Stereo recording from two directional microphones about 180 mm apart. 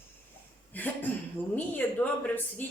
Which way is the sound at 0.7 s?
10° left (ahead or behind).